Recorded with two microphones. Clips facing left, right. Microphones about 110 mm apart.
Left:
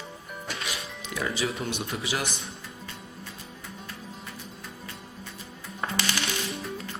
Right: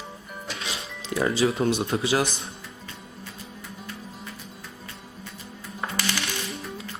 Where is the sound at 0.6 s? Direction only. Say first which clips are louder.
Right 1 dB; 30° right (ahead or behind).